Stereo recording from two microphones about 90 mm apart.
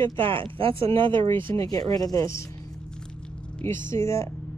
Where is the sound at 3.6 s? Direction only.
30° left (ahead or behind).